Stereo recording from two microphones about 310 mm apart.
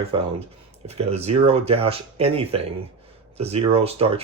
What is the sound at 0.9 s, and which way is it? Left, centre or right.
Speech, centre.